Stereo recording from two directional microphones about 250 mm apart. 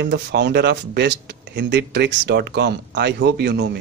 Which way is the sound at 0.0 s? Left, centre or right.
Right.